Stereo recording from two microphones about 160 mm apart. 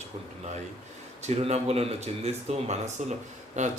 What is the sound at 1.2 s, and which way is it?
Speech, 40° right (ahead or behind).